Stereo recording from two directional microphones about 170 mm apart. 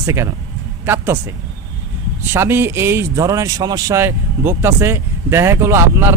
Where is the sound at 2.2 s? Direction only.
15° right (ahead or behind).